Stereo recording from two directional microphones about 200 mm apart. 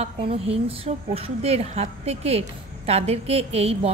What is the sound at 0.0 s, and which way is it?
A woman's voice, 30° right (ahead or behind).